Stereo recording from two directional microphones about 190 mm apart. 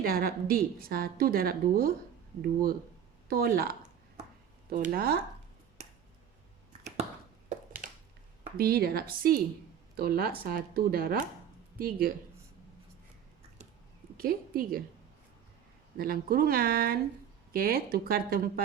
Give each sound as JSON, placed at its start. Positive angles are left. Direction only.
{"t": 0.0, "sound": "a woman's voice", "side_deg": -50}
{"t": 7.8, "sound": "a sound", "side_deg": -45}
{"t": 8.5, "sound": "a woman's voice", "side_deg": -50}
{"t": 14.2, "sound": "a woman's voice", "side_deg": -50}
{"t": 16.0, "sound": "a woman's voice", "side_deg": -50}